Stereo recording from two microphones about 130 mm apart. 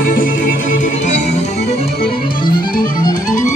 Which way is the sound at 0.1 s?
90° left.